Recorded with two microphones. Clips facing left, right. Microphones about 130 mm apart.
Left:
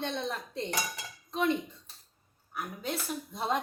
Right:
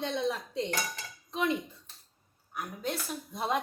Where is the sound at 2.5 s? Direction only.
Centre (ahead or behind).